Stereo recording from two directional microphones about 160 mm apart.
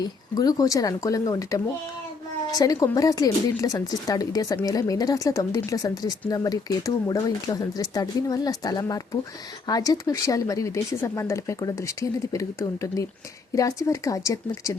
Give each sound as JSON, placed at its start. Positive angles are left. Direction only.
{"t": 0.0, "sound": "speech", "side_deg": 25}